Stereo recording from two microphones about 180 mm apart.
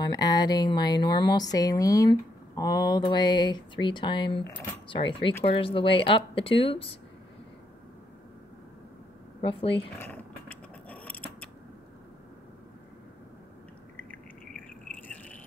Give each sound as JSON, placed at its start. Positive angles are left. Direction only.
{"t": 0.0, "sound": "speech", "side_deg": 20}
{"t": 9.4, "sound": "speech", "side_deg": 30}
{"t": 9.9, "sound": "a sound", "side_deg": 10}